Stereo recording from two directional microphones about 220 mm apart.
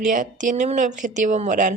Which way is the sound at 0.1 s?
35° right (ahead or behind).